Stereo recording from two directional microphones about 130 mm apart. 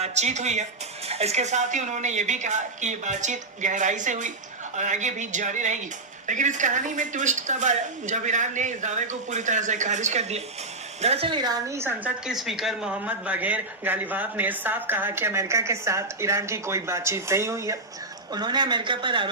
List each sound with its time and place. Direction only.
0.0 s speech: 60° right (ahead or behind)
1.0 s a woman's voice: 55° right (ahead or behind)
11.3 s speech: 30° right (ahead or behind)
11.8 s speech: 15° right (ahead or behind)
12.2 s speech: centre (ahead or behind); by 17.7 s 25° right (ahead or behind)
18.3 s speech: 35° right (ahead or behind)